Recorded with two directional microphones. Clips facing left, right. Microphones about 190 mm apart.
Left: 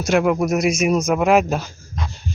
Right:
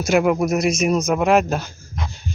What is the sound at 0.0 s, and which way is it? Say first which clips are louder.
Speech: even; 5° right (ahead or behind).